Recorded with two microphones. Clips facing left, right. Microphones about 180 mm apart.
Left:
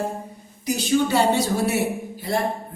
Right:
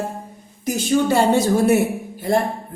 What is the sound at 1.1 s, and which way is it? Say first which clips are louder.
Speech: right 4 dB; 50° right (ahead or behind).